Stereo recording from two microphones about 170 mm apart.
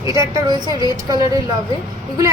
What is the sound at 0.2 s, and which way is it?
A woman's voice, 20° right (ahead or behind).